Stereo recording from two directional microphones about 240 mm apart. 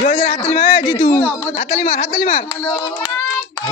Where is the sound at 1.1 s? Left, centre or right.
Centre.